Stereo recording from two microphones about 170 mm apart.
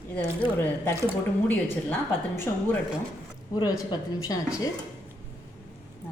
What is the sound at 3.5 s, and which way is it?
Speech, 25° left (ahead or behind).